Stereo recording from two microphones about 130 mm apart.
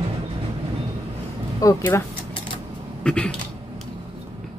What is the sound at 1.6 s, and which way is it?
Speech, 25° left (ahead or behind).